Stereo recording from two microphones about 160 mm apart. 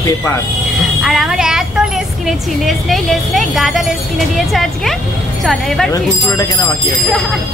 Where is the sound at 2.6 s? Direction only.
Centre (ahead or behind).